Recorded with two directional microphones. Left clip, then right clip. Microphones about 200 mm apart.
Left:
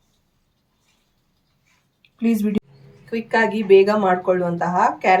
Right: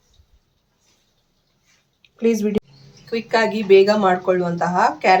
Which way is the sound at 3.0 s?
Centre (ahead or behind).